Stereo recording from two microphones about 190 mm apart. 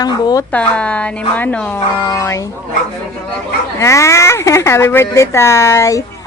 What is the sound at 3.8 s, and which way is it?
Speech, 15° left (ahead or behind).